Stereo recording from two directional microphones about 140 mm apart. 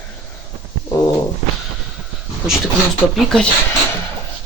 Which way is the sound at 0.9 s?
25° left (ahead or behind).